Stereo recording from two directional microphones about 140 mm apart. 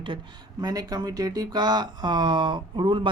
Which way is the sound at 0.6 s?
25° right (ahead or behind).